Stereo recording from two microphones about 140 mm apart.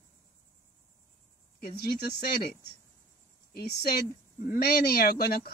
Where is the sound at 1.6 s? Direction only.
90° left.